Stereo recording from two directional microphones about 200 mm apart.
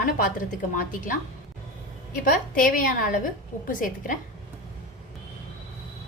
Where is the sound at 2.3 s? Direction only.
45° left (ahead or behind).